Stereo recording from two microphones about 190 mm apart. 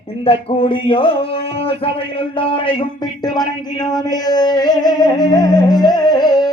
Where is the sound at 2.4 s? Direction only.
30° left (ahead or behind).